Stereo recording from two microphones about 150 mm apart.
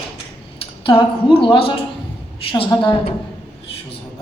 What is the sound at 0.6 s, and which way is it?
A woman's voice, 35° left (ahead or behind).